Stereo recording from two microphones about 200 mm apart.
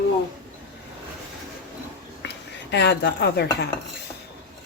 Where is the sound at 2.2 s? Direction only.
60° left (ahead or behind).